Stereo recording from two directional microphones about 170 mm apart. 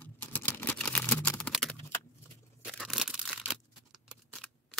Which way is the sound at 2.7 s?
Centre (ahead or behind).